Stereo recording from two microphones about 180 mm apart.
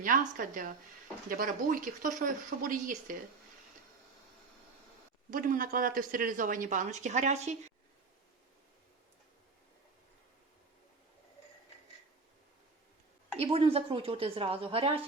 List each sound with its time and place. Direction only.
0.0 s speech: 50° right (ahead or behind)
5.3 s speech: 50° right (ahead or behind)
13.4 s a woman's voice: 30° right (ahead or behind)